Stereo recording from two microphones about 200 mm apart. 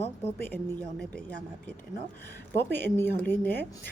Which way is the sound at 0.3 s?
10° left (ahead or behind).